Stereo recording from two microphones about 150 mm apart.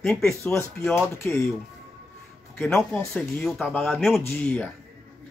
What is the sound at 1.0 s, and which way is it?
Speech, 15° left (ahead or behind).